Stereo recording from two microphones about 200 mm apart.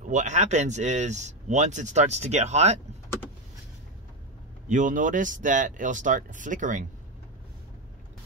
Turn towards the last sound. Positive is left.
turn(degrees=-40)  # may be behind; listen again after turning